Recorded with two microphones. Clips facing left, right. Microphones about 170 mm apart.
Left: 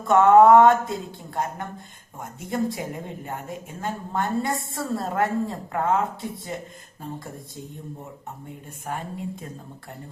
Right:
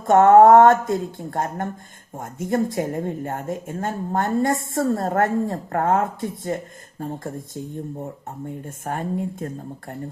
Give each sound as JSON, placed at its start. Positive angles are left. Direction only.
{"t": 0.0, "sound": "speech", "side_deg": -50}
{"t": 8.6, "sound": "speech", "side_deg": -50}